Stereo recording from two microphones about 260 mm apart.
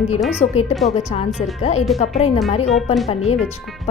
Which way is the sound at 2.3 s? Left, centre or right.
Left.